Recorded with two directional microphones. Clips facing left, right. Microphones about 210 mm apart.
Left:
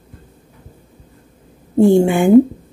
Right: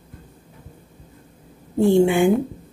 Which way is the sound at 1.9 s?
45° left (ahead or behind).